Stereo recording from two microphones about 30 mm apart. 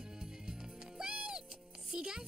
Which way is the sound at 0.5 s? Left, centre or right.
Right.